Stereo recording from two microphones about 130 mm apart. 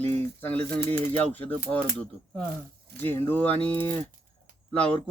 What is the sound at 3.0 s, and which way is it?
Speech, 15° left (ahead or behind).